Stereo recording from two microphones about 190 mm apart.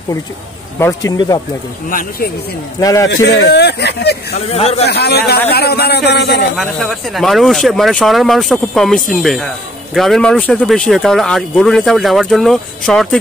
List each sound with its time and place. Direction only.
0.7 s speech: 15° left (ahead or behind)
1.9 s speech: 45° left (ahead or behind)
2.8 s speech: 15° left (ahead or behind)
3.1 s speech: 60° left (ahead or behind)
4.5 s speech: 35° left (ahead or behind)
4.8 s speech: 60° left (ahead or behind)
6.5 s speech: centre (ahead or behind)